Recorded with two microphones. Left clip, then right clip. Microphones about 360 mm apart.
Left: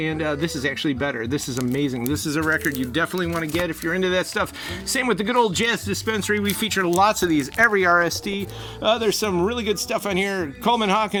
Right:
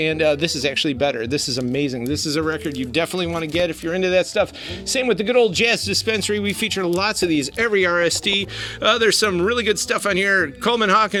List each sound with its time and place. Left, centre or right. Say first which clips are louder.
0.0 s speech: right 6 dB; centre
7.3 s speech: left 1 dB; centre; by 11.2 s right